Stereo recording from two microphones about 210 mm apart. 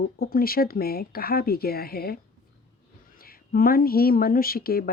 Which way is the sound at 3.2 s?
45° left (ahead or behind).